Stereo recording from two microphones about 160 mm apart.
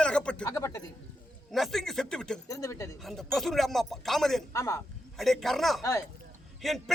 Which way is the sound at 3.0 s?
Centre (ahead or behind).